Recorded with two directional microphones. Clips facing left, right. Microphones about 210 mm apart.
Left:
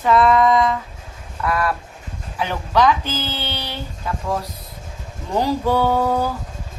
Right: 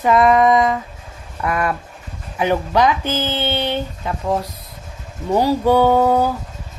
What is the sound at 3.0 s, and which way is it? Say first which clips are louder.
Speech: right 5 dB; 50° right (ahead or behind).